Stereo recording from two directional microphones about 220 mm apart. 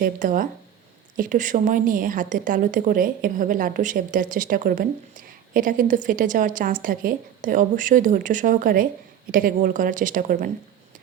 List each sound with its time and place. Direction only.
0.0 s a woman's voice: 35° right (ahead or behind)